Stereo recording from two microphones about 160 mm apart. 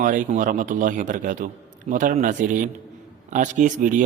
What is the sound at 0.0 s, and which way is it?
Speech, 55° right (ahead or behind).